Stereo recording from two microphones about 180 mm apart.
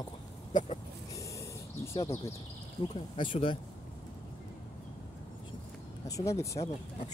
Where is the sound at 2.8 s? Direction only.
25° left (ahead or behind).